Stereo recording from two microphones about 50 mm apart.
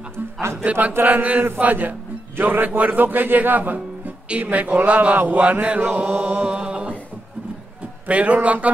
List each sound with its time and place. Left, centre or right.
0.7 s speech: right
0.9 s a man's voice: right
1.6 s a man's voice: right
5.9 s mantra: right
8.1 s speech: right